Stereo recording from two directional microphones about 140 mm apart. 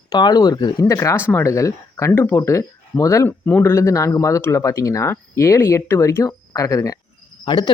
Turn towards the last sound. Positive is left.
turn(degrees=35)  # may be behind; listen again after turning